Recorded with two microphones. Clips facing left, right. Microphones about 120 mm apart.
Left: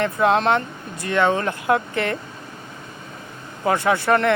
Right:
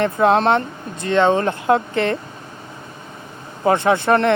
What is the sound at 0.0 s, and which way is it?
Speech, 35° right (ahead or behind).